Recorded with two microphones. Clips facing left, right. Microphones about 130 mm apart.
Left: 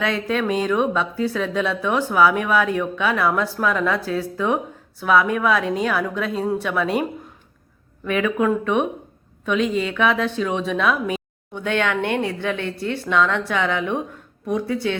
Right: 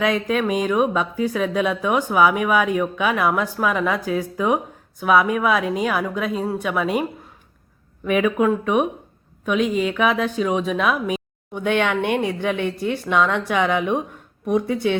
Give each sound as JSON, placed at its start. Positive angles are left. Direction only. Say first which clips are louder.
{"t": 0.0, "sound": "speech", "louder": "right 2 dB", "side_deg": -10}
{"t": 8.0, "sound": "speech", "louder": "right 2 dB", "side_deg": -15}